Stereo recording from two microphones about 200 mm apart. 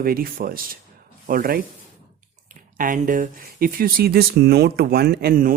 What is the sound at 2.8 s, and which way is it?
Speech, 40° right (ahead or behind).